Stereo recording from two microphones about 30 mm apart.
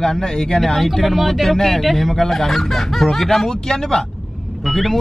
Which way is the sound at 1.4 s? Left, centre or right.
Centre.